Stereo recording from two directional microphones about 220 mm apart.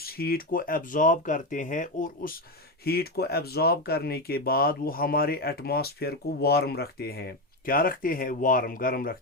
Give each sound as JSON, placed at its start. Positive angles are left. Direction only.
{"t": 0.0, "sound": "speech", "side_deg": 45}